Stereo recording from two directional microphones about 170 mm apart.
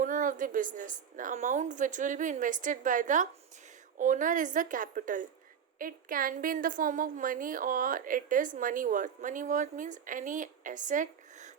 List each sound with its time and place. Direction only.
0.0 s a woman's voice: 50° right (ahead or behind)